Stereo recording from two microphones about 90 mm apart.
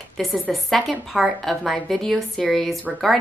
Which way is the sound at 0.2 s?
Centre (ahead or behind).